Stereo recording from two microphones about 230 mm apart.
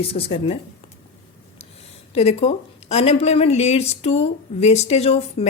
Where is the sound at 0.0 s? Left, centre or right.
Left.